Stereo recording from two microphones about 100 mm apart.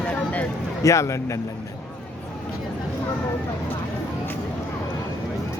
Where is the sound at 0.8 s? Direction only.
30° left (ahead or behind).